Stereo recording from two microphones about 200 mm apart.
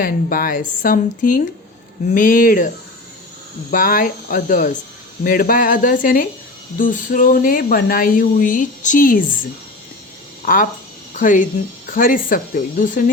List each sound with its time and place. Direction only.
0.0 s speech: 45° left (ahead or behind)
10.4 s speech: 45° left (ahead or behind)